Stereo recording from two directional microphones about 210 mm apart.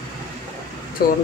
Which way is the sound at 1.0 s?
45° left (ahead or behind).